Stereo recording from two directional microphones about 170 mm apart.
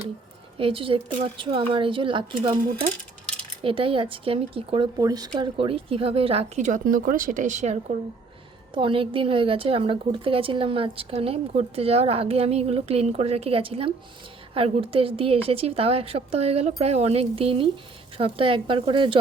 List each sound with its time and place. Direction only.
0.6 s a woman's voice: 30° right (ahead or behind)
3.6 s a woman's voice: 30° right (ahead or behind)
8.7 s a woman's voice: 30° right (ahead or behind)